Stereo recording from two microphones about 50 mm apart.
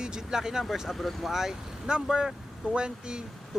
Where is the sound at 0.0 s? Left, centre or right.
Centre.